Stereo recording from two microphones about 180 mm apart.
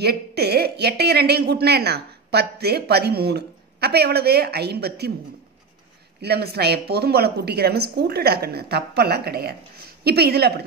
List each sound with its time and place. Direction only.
0.0 s a woman's voice: 65° right (ahead or behind)
6.2 s a woman's voice: 65° right (ahead or behind)